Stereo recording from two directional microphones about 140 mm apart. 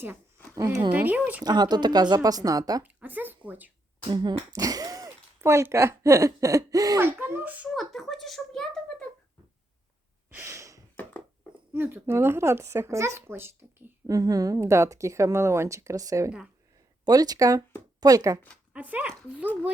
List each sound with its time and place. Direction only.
0.5 s speech: 20° right (ahead or behind)
0.9 s speech: 10° right (ahead or behind)
1.5 s speech: 30° right (ahead or behind)
2.8 s speech: 15° right (ahead or behind)
4.1 s speech: 30° right (ahead or behind); by 7.7 s 10° right (ahead or behind)
7.8 s a sound: centre (ahead or behind)
10.2 s gasp: 15° right (ahead or behind)
11.7 s speech: 15° right (ahead or behind)
18.7 s speech: 10° right (ahead or behind)